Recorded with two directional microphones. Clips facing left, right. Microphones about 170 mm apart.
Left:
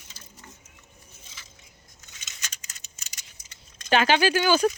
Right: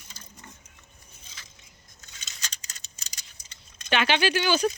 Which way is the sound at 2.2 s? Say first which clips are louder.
Right 1 dB; 35° right (ahead or behind).